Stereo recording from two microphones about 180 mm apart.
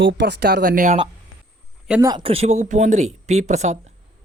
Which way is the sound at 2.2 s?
35° right (ahead or behind).